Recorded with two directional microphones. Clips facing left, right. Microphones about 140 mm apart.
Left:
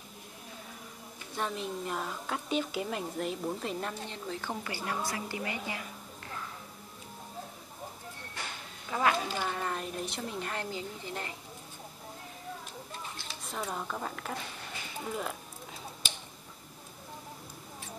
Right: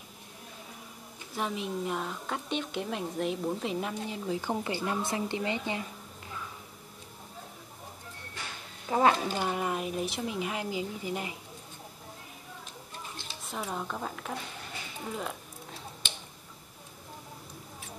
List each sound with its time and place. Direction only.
1.3 s a woman's voice: 5° right (ahead or behind); by 5.9 s 25° right (ahead or behind)
8.9 s a woman's voice: 30° right (ahead or behind)
9.5 s a woman's voice: 10° right (ahead or behind)
13.4 s a woman's voice: centre (ahead or behind)
15.1 s a sound: centre (ahead or behind)